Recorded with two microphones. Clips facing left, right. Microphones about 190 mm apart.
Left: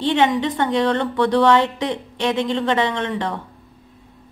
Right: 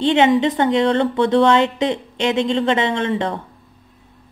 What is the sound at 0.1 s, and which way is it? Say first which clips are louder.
A woman's voice: right 3 dB; 20° right (ahead or behind).